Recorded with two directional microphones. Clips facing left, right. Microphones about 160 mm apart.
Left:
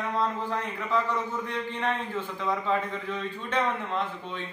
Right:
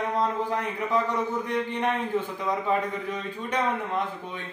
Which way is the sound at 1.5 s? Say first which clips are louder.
Right 3 dB; 15° right (ahead or behind).